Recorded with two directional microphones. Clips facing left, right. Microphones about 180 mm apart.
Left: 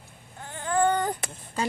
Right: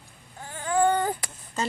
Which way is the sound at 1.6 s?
10° left (ahead or behind).